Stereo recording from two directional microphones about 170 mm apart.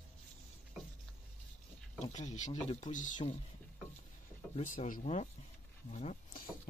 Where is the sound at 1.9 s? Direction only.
45° left (ahead or behind).